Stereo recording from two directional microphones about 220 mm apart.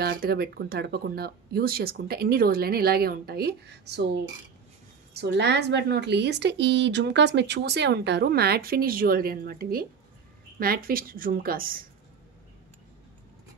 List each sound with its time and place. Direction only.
0.0 s a woman's voice: 45° right (ahead or behind)